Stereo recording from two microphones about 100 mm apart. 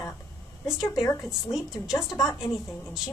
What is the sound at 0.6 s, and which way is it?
Speech, centre (ahead or behind).